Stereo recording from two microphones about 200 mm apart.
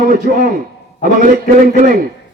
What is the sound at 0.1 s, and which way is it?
Speech, 45° right (ahead or behind).